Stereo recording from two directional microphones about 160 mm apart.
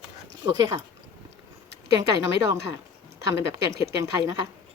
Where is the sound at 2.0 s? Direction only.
20° right (ahead or behind).